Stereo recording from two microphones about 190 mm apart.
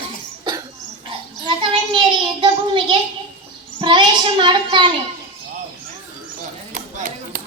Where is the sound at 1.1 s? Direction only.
25° right (ahead or behind).